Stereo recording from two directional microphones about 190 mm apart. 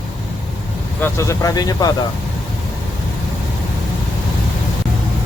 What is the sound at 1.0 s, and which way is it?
Speech, 15° left (ahead or behind).